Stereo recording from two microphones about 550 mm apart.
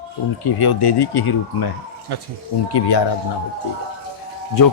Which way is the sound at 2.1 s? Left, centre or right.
Right.